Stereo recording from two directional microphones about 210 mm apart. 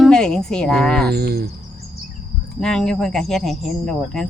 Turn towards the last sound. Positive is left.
turn(degrees=0)  # may be behind; listen again after turning